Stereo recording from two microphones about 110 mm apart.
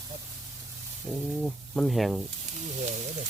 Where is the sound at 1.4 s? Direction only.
Centre (ahead or behind).